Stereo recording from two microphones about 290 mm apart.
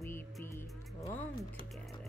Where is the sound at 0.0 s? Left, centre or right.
Centre.